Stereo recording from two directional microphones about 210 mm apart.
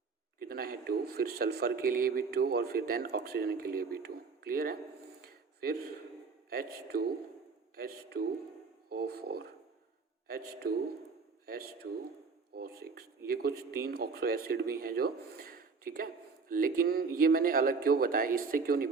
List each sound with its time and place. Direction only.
0.4 s speech: 45° right (ahead or behind)
5.2 s a sound: 45° right (ahead or behind)
6.5 s speech: 45° right (ahead or behind)